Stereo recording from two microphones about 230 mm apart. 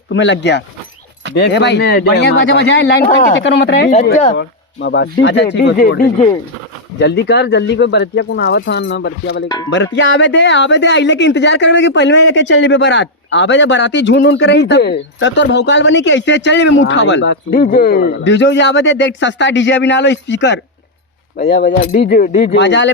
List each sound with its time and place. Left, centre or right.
0.1 s a woman's voice: left
17.5 s a woman's voice: left
22.5 s a woman's voice: left